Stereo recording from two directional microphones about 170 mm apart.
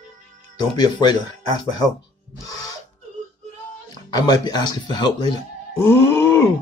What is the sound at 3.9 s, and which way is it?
Speech, 25° left (ahead or behind).